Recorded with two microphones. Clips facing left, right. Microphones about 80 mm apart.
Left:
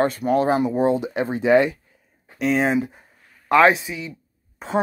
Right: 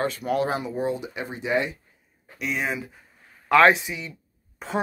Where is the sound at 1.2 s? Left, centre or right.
Left.